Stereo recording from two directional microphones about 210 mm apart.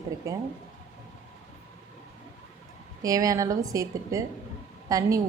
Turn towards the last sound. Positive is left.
turn(degrees=-15)  # may be behind; listen again after turning